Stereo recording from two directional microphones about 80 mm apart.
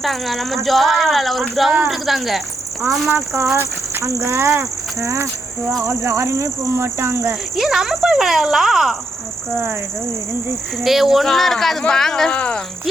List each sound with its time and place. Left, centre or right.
0.0 s speech: centre
3.3 s speech: right
7.5 s speech: centre
10.8 s speech: centre